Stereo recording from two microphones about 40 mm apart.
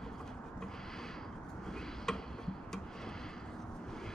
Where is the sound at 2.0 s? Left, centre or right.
Centre.